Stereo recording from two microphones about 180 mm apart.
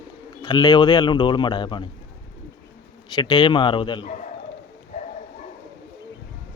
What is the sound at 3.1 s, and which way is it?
Speech, 25° left (ahead or behind).